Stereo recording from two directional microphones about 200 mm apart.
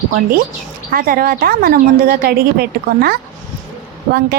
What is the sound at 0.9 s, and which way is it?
A woman's voice, 45° right (ahead or behind).